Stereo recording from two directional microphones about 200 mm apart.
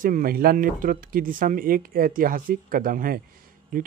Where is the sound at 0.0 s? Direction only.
45° right (ahead or behind).